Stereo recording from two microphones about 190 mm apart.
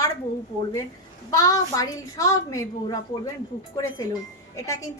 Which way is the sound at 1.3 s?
15° left (ahead or behind).